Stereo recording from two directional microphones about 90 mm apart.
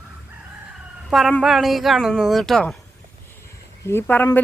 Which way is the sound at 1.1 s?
Centre (ahead or behind).